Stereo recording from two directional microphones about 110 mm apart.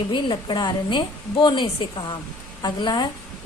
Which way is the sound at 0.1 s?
45° left (ahead or behind).